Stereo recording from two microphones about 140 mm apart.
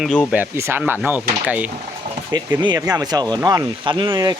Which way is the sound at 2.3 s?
30° right (ahead or behind).